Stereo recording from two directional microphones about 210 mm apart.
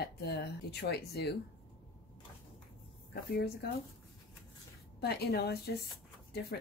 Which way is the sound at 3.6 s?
50° left (ahead or behind).